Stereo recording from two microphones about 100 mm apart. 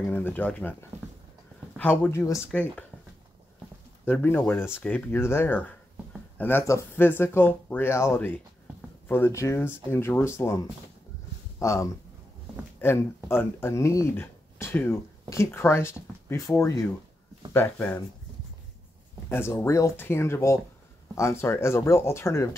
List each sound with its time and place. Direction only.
0.1 s speech: 20° left (ahead or behind)
1.8 s speech: 20° left (ahead or behind)
2.5 s speech: 10° left (ahead or behind)
4.0 s speech: 20° left (ahead or behind)
11.6 s speech: 30° left (ahead or behind)
19.5 s speech: 35° left (ahead or behind)